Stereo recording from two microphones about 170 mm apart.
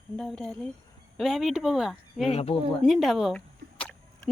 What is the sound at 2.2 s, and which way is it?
Speech, 35° left (ahead or behind).